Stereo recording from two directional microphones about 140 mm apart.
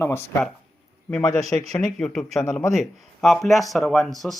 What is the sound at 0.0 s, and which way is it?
Speech, 15° left (ahead or behind).